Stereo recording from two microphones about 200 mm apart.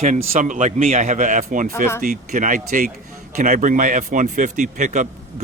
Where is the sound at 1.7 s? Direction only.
10° left (ahead or behind).